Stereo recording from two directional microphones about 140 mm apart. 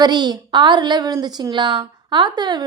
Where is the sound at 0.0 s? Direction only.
30° right (ahead or behind).